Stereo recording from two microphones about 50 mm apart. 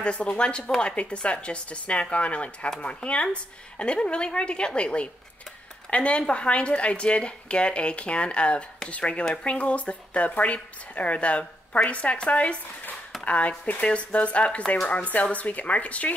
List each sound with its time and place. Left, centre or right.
0.0 s speech: left